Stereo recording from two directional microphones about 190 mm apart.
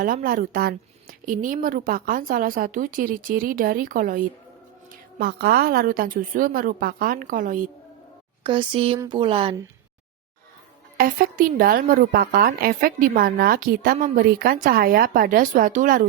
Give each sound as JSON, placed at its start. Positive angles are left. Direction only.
{"t": 0.0, "sound": "a woman's voice", "side_deg": -50}
{"t": 8.4, "sound": "speech", "side_deg": -25}
{"t": 10.9, "sound": "a woman's voice", "side_deg": -50}